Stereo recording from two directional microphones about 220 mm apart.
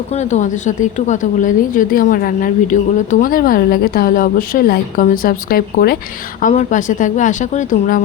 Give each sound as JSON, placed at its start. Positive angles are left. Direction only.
{"t": 0.2, "sound": "a woman's voice", "side_deg": 30}
{"t": 6.4, "sound": "a woman's voice", "side_deg": 30}